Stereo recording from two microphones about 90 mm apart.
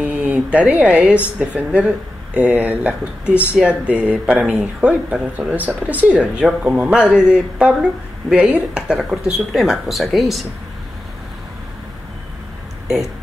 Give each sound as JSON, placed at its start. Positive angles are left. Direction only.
{"t": 0.0, "sound": "speech", "side_deg": -15}
{"t": 12.8, "sound": "speech", "side_deg": -5}